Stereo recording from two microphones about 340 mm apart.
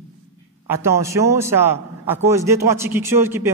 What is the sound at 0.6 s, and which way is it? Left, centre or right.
A man's voice, centre.